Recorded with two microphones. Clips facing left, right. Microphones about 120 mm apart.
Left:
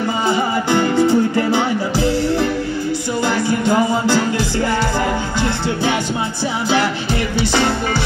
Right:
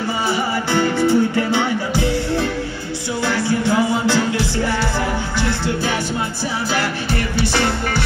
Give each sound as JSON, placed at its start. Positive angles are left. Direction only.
{"t": 0.3, "sound": "music", "side_deg": 15}
{"t": 3.3, "sound": "music", "side_deg": 15}
{"t": 6.7, "sound": "music", "side_deg": 20}